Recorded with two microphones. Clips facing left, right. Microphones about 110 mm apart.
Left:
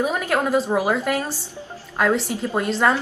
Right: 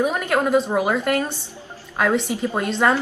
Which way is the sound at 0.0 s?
Centre (ahead or behind).